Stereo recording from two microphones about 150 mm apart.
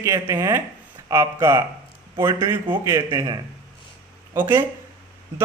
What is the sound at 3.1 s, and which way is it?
Speech, 25° right (ahead or behind).